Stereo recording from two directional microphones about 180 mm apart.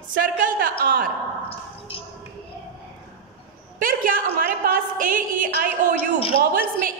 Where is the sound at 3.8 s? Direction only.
50° right (ahead or behind).